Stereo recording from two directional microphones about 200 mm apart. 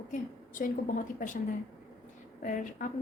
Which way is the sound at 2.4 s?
40° left (ahead or behind).